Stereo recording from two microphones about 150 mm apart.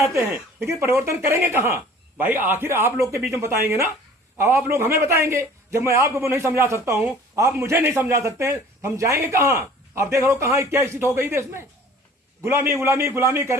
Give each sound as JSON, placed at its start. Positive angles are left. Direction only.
{"t": 0.1, "sound": "a man's voice", "side_deg": -20}